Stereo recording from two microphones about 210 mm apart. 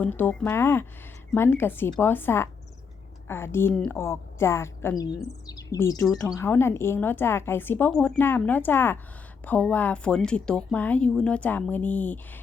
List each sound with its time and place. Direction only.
0.0 s speech: 10° left (ahead or behind)